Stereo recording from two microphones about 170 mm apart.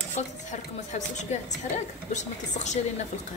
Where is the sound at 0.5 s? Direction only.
45° left (ahead or behind).